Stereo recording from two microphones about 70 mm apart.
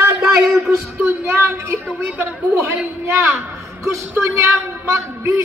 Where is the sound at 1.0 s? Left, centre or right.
Right.